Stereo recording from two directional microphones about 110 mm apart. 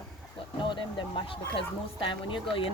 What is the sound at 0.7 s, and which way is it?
Speech, 45° left (ahead or behind).